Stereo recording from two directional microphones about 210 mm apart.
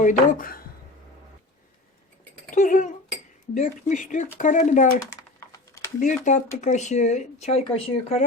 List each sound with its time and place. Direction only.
0.0 s speech: 40° left (ahead or behind)
2.6 s speech: 40° left (ahead or behind)
5.4 s typing: 15° left (ahead or behind)
6.0 s speech: 35° left (ahead or behind)